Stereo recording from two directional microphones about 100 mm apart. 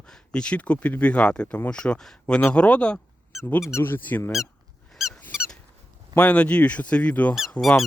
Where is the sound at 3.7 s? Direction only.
25° left (ahead or behind).